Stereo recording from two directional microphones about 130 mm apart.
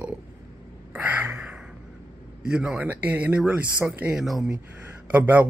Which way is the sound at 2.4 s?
5° right (ahead or behind).